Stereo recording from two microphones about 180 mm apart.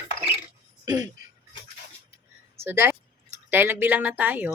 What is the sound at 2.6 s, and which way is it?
Speech, 15° right (ahead or behind).